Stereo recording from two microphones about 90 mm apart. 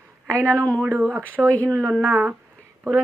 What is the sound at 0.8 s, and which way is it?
A woman's voice, 25° right (ahead or behind).